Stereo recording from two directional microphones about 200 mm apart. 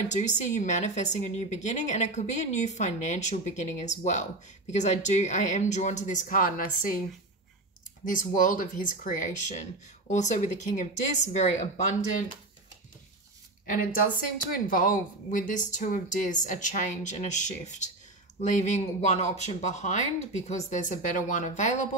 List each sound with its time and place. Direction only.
0.1 s a woman's voice: 35° left (ahead or behind)
8.0 s a woman's voice: 40° left (ahead or behind)
14.5 s a woman's voice: 45° left (ahead or behind)